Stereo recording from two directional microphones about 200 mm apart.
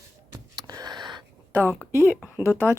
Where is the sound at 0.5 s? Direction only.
20° right (ahead or behind).